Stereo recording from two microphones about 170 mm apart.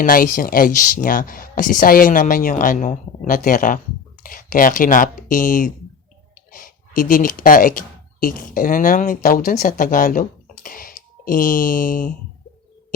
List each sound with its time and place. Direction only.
0.0 s speech: 55° left (ahead or behind)